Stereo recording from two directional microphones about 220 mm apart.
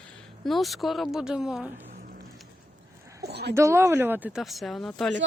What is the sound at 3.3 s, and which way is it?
Speech, 50° right (ahead or behind).